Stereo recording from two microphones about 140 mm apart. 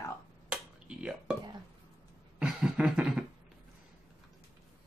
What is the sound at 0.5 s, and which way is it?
Dishes, 5° right (ahead or behind).